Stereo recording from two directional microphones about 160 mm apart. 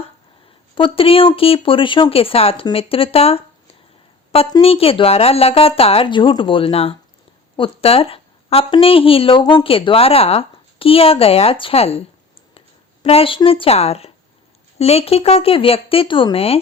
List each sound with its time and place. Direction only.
0.8 s speech: 35° left (ahead or behind)
4.6 s a woman's voice: 35° left (ahead or behind)